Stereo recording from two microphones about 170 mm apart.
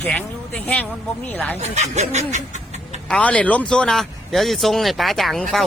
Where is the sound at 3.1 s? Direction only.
5° left (ahead or behind).